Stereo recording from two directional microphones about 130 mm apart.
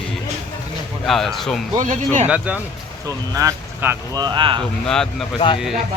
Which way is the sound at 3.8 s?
15° right (ahead or behind).